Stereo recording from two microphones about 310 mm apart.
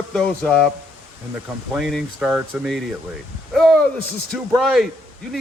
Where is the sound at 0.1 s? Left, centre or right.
Centre.